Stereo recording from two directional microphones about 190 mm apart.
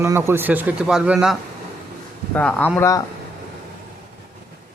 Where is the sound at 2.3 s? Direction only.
5° left (ahead or behind).